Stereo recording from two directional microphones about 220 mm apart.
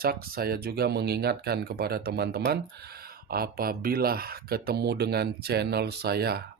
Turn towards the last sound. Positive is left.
turn(degrees=-45)  # may be behind; listen again after turning